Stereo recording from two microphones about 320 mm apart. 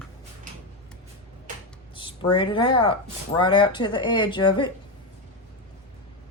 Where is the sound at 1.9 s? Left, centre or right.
Centre.